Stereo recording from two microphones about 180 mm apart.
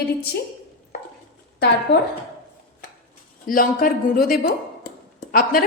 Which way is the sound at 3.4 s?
50° left (ahead or behind).